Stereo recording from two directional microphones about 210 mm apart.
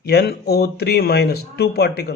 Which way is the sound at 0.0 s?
50° left (ahead or behind).